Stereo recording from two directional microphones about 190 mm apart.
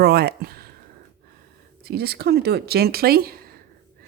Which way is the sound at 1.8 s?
55° right (ahead or behind).